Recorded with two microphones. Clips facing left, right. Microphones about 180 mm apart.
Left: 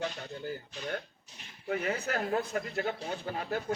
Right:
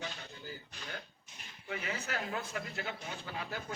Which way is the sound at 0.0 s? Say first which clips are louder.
Left 8 dB; 55° left (ahead or behind).